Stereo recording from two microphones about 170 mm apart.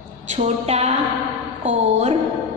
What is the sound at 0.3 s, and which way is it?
A woman's voice, 40° right (ahead or behind).